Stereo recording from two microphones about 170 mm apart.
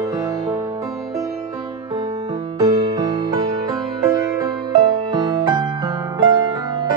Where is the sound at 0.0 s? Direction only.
20° right (ahead or behind).